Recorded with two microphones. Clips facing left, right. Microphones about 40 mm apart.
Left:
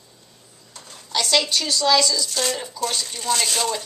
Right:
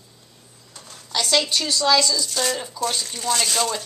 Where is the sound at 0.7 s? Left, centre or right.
Centre.